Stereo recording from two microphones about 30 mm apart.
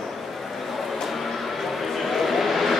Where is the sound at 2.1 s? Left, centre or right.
Centre.